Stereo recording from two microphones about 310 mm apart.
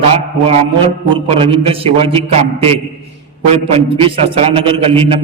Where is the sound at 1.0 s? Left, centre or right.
Centre.